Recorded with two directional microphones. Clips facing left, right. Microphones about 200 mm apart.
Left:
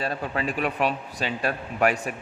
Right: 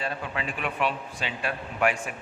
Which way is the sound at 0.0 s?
40° left (ahead or behind).